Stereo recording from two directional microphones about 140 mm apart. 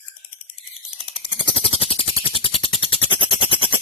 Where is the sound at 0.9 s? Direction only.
40° left (ahead or behind).